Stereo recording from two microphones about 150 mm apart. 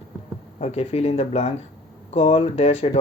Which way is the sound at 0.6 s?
45° left (ahead or behind).